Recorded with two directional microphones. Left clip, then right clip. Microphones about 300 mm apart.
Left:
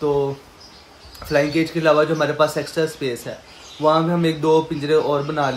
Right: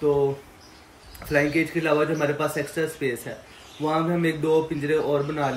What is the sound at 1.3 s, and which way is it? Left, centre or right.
Speech, centre.